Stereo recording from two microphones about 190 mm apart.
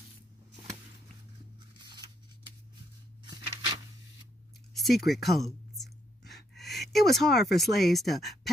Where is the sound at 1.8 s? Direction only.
25° right (ahead or behind).